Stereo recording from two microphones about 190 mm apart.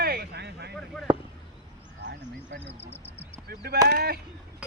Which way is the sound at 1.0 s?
5° left (ahead or behind).